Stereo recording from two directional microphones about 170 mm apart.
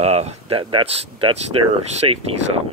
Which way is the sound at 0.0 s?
40° right (ahead or behind).